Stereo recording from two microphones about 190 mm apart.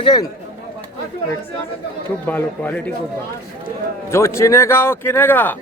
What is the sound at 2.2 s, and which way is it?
Speech, 10° left (ahead or behind).